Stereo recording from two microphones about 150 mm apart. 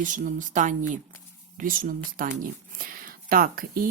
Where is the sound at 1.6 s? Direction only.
70° right (ahead or behind).